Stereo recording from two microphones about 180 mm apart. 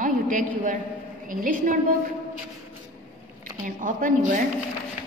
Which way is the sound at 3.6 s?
45° right (ahead or behind).